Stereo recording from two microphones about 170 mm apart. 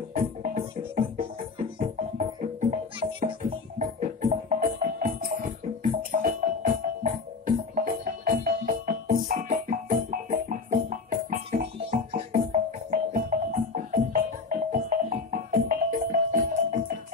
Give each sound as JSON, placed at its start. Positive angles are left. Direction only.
{"t": 0.1, "sound": "music", "side_deg": -50}
{"t": 1.8, "sound": "music", "side_deg": -50}
{"t": 3.0, "sound": "music", "side_deg": -30}
{"t": 12.9, "sound": "music", "side_deg": -45}